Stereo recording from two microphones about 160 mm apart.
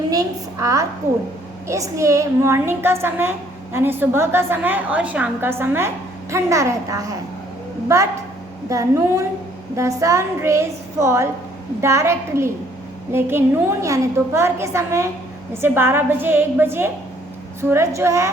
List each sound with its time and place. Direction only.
0.1 s a woman's voice: 20° right (ahead or behind)
8.7 s a woman's voice: 20° right (ahead or behind)